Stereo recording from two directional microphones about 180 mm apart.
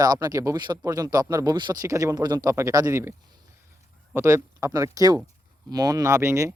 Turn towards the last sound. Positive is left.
turn(degrees=-15)  # may be behind; listen again after turning